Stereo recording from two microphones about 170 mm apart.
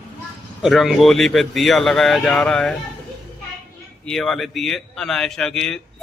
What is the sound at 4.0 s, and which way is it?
Speech, 5° left (ahead or behind).